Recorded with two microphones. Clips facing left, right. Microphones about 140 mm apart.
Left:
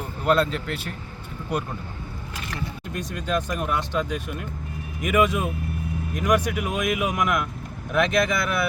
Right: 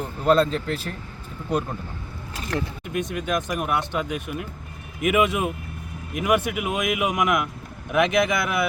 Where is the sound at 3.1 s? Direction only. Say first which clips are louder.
Left 3 dB; 10° right (ahead or behind).